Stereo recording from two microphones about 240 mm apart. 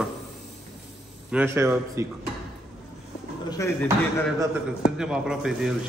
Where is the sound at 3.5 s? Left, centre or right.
Centre.